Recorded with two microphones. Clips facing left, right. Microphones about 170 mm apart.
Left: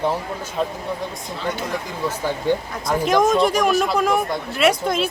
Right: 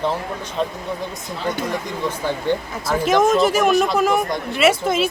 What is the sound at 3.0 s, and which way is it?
Speech, 5° right (ahead or behind).